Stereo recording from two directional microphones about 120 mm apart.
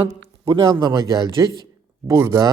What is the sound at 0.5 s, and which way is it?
Speech, 35° right (ahead or behind).